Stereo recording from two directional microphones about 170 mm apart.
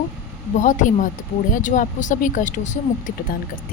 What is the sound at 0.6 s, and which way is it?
Speech, 50° left (ahead or behind).